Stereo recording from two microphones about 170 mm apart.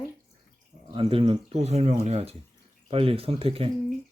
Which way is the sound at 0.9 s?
30° right (ahead or behind).